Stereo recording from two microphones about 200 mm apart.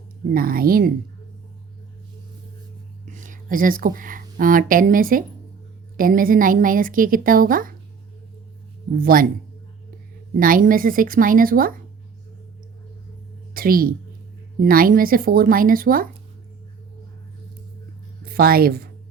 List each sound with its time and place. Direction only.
0.3 s a woman's voice: 45° right (ahead or behind)
3.1 s a woman's voice: 40° right (ahead or behind)
9.0 s a woman's voice: 45° right (ahead or behind)
10.4 s a woman's voice: 45° right (ahead or behind)
13.5 s a woman's voice: 45° right (ahead or behind)
18.3 s a woman's voice: 50° right (ahead or behind)